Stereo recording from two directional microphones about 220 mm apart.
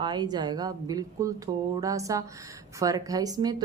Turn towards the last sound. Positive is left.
turn(degrees=-20)  # may be behind; listen again after turning